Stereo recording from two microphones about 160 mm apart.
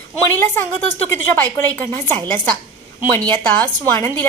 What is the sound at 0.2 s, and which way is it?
A woman's voice, 15° left (ahead or behind).